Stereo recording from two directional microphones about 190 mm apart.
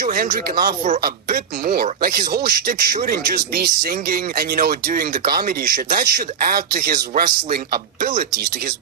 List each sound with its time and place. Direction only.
0.0 s speech: 45° right (ahead or behind)